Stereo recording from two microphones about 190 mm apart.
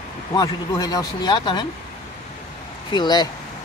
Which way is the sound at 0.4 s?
20° left (ahead or behind).